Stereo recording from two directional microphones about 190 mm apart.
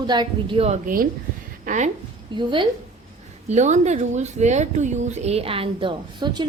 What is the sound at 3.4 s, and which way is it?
Speech, 40° right (ahead or behind).